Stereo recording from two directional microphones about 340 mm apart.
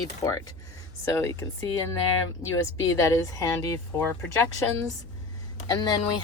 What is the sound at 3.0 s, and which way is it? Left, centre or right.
Speech, centre.